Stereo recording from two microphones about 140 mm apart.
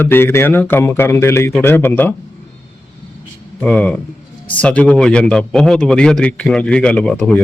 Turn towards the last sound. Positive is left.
turn(degrees=5)  # may be behind; listen again after turning